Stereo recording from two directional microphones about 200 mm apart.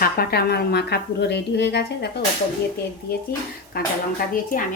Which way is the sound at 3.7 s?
50° left (ahead or behind).